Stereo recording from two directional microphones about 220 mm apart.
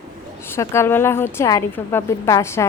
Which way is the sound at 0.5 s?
10° left (ahead or behind).